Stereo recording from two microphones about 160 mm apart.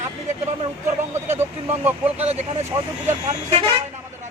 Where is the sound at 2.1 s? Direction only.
40° right (ahead or behind).